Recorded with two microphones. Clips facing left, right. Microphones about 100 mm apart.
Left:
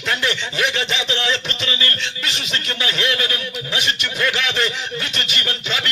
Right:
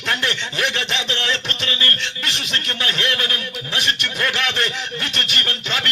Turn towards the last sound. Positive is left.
turn(degrees=-55)  # may be behind; listen again after turning